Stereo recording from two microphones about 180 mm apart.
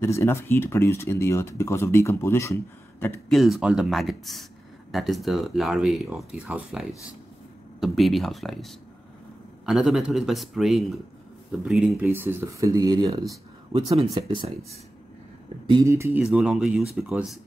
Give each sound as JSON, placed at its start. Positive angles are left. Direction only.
{"t": 0.0, "sound": "speech", "side_deg": 15}
{"t": 3.3, "sound": "speech", "side_deg": 0}
{"t": 15.7, "sound": "speech", "side_deg": -15}